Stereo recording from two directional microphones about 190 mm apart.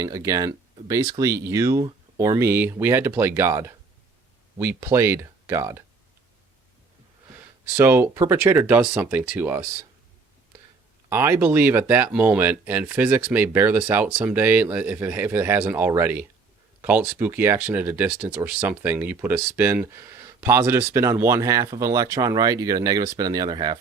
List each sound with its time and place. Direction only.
0.0 s speech: 15° right (ahead or behind)
7.8 s speech: 15° right (ahead or behind)
11.1 s speech: 10° right (ahead or behind)